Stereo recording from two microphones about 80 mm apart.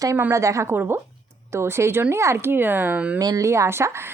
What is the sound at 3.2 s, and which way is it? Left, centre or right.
Speech, right.